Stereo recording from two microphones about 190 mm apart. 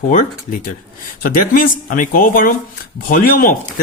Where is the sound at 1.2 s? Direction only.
50° left (ahead or behind).